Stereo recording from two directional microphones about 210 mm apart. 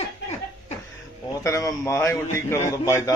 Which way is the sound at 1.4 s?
15° left (ahead or behind).